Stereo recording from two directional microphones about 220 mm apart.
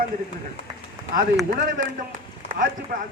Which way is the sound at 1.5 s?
35° right (ahead or behind).